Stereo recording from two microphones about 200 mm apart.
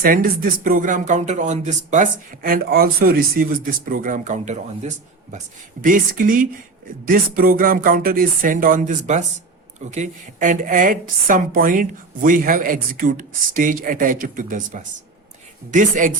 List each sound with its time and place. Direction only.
0.0 s a woman's voice: 45° right (ahead or behind)